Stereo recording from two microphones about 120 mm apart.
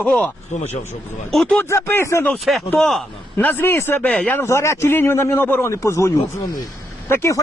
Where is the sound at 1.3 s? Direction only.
5° left (ahead or behind).